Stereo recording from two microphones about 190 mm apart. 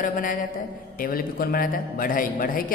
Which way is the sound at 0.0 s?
45° left (ahead or behind).